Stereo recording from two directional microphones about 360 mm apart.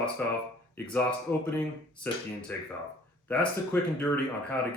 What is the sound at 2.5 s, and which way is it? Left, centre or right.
Speech, centre.